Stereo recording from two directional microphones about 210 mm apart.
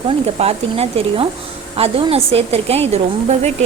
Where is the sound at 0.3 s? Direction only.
30° right (ahead or behind).